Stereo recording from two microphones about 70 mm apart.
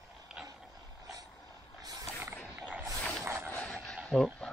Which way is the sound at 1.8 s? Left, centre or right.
Right.